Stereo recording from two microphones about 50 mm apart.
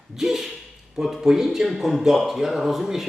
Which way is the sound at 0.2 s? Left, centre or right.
Centre.